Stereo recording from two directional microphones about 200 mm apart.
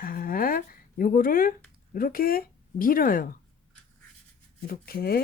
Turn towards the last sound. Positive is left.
turn(degrees=50)  # may be behind; listen again after turning